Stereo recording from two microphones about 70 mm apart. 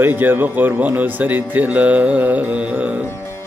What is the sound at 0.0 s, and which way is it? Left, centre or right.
Speech, right.